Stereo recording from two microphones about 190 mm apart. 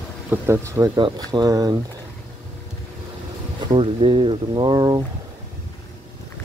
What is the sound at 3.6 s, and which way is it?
Speech, 30° right (ahead or behind).